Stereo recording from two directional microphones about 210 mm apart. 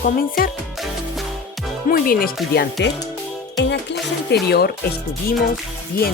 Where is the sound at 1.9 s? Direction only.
45° left (ahead or behind).